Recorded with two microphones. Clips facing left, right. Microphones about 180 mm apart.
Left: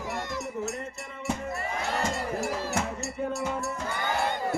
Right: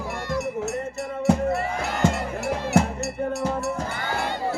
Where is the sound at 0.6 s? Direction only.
65° right (ahead or behind).